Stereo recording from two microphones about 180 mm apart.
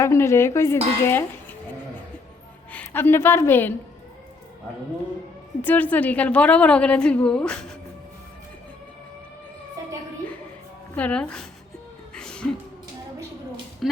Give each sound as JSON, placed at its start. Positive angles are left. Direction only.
{"t": 0.0, "sound": "a woman's voice", "side_deg": 15}
{"t": 2.7, "sound": "a woman's voice", "side_deg": 10}
{"t": 5.6, "sound": "a woman's voice", "side_deg": 10}
{"t": 10.9, "sound": "speech", "side_deg": 5}
{"t": 12.1, "sound": "music", "side_deg": 5}
{"t": 13.8, "sound": "a woman's voice", "side_deg": 0}